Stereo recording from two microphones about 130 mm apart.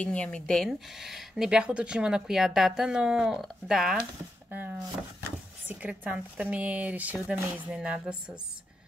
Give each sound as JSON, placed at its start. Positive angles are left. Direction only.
{"t": 0.0, "sound": "speech", "side_deg": 10}
{"t": 4.5, "sound": "speech", "side_deg": -15}